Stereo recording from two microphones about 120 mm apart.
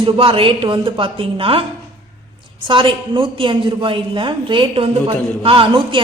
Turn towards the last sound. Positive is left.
turn(degrees=-45)  # may be behind; listen again after turning